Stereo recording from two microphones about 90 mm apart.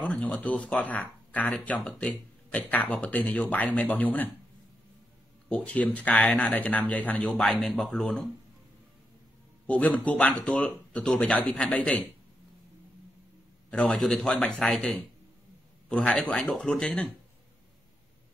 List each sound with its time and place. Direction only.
0.1 s speech: 15° left (ahead or behind)
5.7 s speech: 15° left (ahead or behind)
9.7 s speech: 20° left (ahead or behind)
13.7 s speech: 10° left (ahead or behind)